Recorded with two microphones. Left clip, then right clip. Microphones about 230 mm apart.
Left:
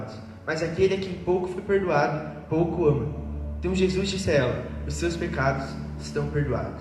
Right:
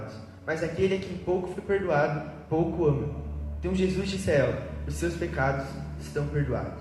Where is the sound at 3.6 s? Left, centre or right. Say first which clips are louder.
Left 4 dB; left.